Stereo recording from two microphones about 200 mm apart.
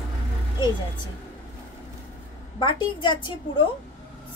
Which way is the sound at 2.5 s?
25° left (ahead or behind).